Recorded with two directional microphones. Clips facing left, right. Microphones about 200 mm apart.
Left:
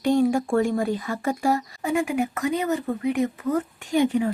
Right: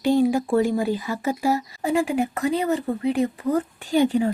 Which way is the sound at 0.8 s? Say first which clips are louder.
Right 1 dB; 5° right (ahead or behind).